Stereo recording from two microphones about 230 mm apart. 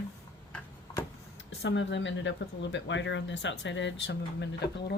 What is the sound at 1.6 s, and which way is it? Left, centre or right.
Speech, left.